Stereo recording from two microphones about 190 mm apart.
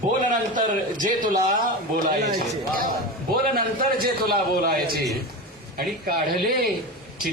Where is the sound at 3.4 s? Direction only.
50° right (ahead or behind).